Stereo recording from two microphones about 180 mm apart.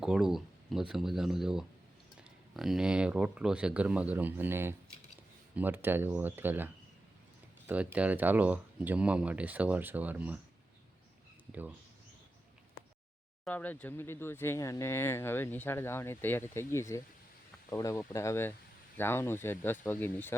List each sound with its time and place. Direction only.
0.0 s speech: 5° right (ahead or behind)
7.7 s speech: 10° right (ahead or behind)
13.4 s speech: 10° left (ahead or behind)